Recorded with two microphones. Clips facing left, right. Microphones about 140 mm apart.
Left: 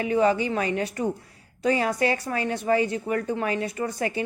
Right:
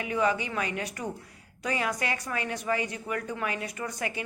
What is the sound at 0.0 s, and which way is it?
A woman's voice, 35° left (ahead or behind).